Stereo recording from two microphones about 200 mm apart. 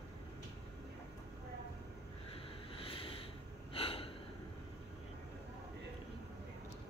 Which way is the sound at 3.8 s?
30° left (ahead or behind).